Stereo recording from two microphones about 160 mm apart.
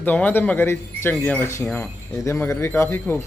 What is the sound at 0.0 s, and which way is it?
A man's voice, 10° left (ahead or behind).